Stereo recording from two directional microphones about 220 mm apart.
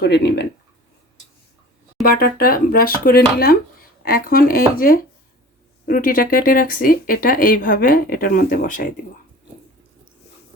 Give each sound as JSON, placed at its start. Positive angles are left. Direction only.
{"t": 0.0, "sound": "speech", "side_deg": 50}
{"t": 2.0, "sound": "speech", "side_deg": 40}